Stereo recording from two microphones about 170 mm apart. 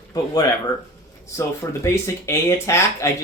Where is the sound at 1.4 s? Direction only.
15° left (ahead or behind).